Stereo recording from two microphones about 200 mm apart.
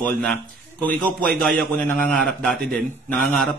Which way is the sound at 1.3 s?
45° right (ahead or behind).